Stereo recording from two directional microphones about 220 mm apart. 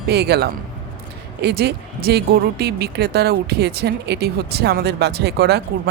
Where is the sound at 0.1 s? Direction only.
50° right (ahead or behind).